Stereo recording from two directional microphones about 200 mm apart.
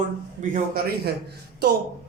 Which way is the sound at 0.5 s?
45° right (ahead or behind).